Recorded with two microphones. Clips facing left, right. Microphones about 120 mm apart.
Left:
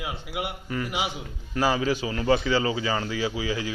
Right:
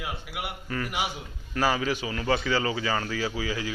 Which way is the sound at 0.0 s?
20° left (ahead or behind).